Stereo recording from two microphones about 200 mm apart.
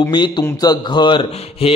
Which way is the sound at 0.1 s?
20° left (ahead or behind).